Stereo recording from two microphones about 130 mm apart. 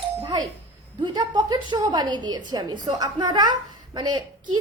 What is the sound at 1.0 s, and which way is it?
A woman's voice, 35° right (ahead or behind).